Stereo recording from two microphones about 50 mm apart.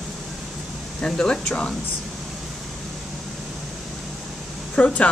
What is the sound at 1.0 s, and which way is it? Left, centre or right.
Speech, centre.